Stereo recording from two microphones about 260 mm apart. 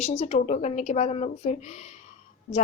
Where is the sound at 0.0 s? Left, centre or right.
Left.